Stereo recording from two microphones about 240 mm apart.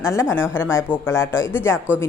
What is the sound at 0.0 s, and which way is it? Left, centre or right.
A woman's voice, centre.